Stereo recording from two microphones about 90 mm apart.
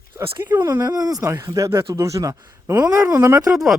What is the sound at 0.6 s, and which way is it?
Speech, 50° right (ahead or behind).